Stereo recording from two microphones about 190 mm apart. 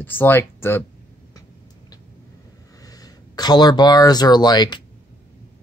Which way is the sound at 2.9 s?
20° left (ahead or behind).